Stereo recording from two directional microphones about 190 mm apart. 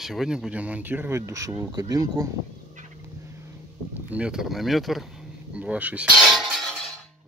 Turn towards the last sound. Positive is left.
turn(degrees=0)  # may be behind; listen again after turning